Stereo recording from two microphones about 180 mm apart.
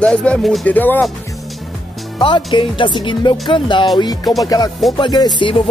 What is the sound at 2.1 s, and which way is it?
Speech, 25° left (ahead or behind).